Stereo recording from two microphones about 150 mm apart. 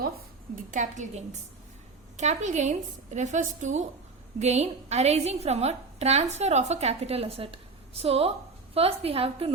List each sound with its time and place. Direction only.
0.7 s a woman's voice: 55° right (ahead or behind); by 9.5 s 40° right (ahead or behind)